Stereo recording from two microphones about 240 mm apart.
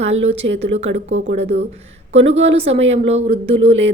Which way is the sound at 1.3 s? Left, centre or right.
Right.